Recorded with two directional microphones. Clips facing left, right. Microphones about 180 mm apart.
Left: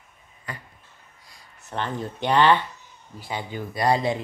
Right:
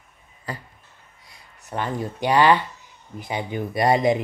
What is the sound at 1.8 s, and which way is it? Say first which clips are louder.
Speech: right 2 dB; 10° right (ahead or behind).